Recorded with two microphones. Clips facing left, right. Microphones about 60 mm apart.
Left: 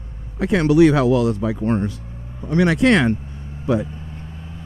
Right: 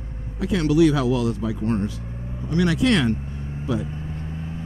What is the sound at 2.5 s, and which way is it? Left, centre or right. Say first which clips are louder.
Speech: left 4 dB; left.